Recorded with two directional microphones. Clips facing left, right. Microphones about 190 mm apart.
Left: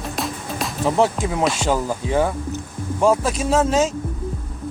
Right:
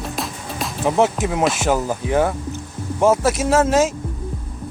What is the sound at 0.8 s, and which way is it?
Speech, 20° right (ahead or behind).